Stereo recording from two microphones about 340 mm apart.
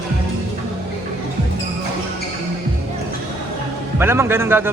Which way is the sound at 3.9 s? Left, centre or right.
Centre.